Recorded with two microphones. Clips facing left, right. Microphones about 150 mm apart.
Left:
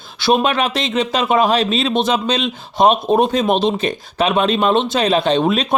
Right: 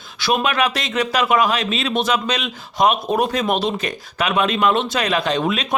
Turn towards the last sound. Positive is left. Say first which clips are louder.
# left 5 dB
turn(degrees=30)  # may be behind; listen again after turning